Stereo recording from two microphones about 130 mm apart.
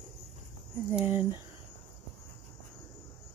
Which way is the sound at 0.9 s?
15° right (ahead or behind).